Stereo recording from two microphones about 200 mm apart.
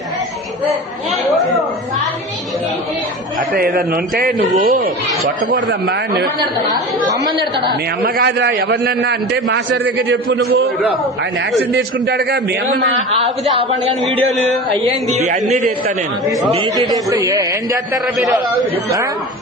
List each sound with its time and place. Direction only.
3.5 s a man's voice: 50° right (ahead or behind)
7.1 s a man's voice: 20° right (ahead or behind)
7.7 s a man's voice: 55° right (ahead or behind)
11.7 s a man's voice: 55° right (ahead or behind)
13.1 s a man's voice: 30° right (ahead or behind)
14.0 s a man's voice: centre (ahead or behind)
15.1 s a man's voice: 35° right (ahead or behind)
16.7 s speech: 20° right (ahead or behind)